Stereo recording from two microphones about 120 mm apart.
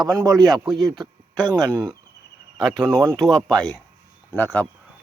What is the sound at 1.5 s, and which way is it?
Speech, 30° right (ahead or behind).